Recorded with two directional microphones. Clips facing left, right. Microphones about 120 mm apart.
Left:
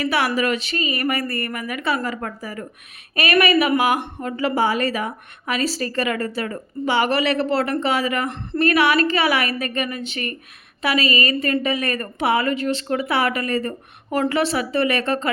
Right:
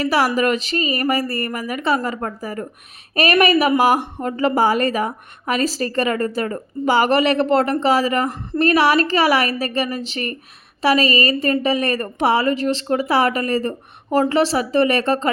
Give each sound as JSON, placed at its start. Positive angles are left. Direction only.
{"t": 0.0, "sound": "a woman's voice", "side_deg": -35}